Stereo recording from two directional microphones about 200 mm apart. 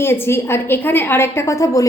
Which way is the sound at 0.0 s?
10° left (ahead or behind).